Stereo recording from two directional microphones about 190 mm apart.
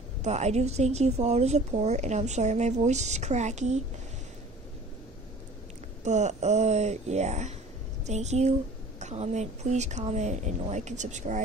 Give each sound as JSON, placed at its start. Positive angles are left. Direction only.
{"t": 0.2, "sound": "a woman's voice", "side_deg": -35}
{"t": 6.0, "sound": "a woman's voice", "side_deg": -35}